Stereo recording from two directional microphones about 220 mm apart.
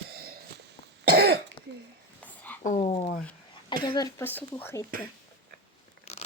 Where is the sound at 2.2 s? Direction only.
5° left (ahead or behind).